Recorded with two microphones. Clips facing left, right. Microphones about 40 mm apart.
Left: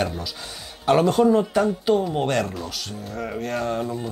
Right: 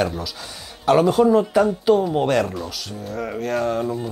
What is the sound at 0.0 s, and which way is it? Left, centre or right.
Speech, centre.